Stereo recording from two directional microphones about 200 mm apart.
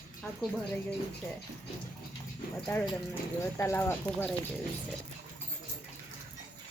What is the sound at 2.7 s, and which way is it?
Speech, 15° left (ahead or behind).